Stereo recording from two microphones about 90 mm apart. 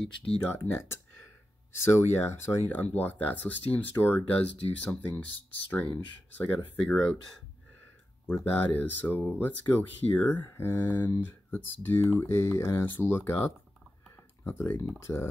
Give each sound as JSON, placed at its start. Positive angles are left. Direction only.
{"t": 0.5, "sound": "speech", "side_deg": 25}
{"t": 8.3, "sound": "speech", "side_deg": 20}